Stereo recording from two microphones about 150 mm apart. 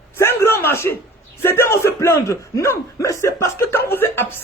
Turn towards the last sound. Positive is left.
turn(degrees=15)  # may be behind; listen again after turning